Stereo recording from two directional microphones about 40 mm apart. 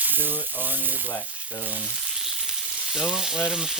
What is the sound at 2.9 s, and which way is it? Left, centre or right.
Frying, centre.